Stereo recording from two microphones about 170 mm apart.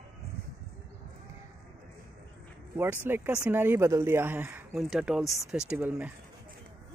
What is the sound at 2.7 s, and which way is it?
Speech, 15° right (ahead or behind).